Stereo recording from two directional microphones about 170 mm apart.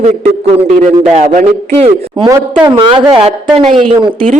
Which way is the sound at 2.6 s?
30° right (ahead or behind).